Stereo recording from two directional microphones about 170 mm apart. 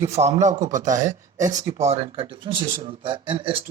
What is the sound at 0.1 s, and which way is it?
Speech, 40° right (ahead or behind).